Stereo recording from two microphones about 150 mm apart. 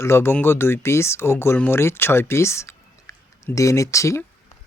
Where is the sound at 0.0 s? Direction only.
15° left (ahead or behind).